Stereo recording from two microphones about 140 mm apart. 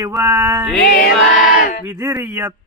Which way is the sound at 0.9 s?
90° left.